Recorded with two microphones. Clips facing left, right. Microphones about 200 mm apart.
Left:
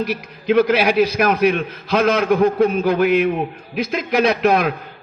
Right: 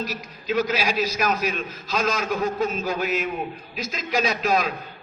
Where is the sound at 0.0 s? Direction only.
60° left (ahead or behind).